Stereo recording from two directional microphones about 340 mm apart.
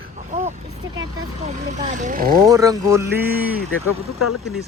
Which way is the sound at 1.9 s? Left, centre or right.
Right.